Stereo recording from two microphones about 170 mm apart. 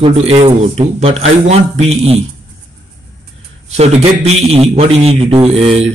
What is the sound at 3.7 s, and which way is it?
Speech, 40° right (ahead or behind).